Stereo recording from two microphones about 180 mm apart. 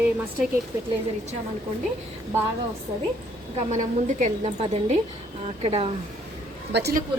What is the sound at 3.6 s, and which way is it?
A woman's voice, 40° right (ahead or behind).